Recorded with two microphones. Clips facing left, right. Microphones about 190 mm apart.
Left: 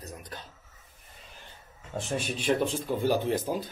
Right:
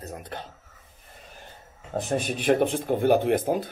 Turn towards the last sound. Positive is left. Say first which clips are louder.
# right 5 dB
turn(degrees=-55)  # may be behind; listen again after turning